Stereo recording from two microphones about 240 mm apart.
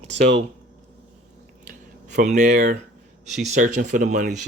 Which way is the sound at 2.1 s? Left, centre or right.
Right.